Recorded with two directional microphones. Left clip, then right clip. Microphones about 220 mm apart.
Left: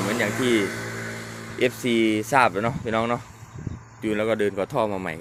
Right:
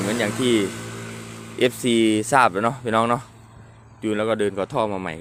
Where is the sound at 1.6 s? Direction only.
15° right (ahead or behind).